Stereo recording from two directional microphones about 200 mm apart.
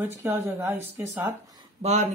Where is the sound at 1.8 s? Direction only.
35° right (ahead or behind).